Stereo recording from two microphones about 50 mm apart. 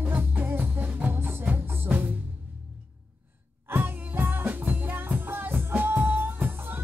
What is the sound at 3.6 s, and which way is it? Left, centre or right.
Music, right.